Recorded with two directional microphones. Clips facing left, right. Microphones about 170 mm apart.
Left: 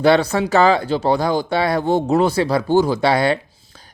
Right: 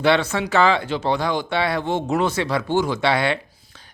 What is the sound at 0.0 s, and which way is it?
Speech, 40° left (ahead or behind).